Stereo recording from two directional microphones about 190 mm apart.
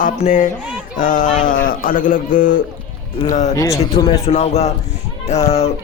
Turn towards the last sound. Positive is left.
turn(degrees=35)  # may be behind; listen again after turning